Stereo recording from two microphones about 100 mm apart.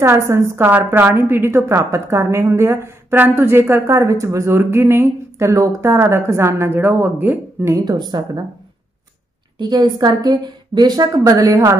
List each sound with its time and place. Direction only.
0.0 s a woman's voice: 25° right (ahead or behind)
7.7 s a woman's voice: 40° right (ahead or behind)
9.6 s a woman's voice: 45° right (ahead or behind)